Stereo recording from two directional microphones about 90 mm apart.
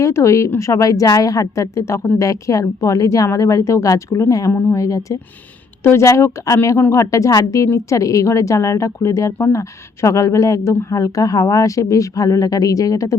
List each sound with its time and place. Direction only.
0.0 s speech: 30° left (ahead or behind)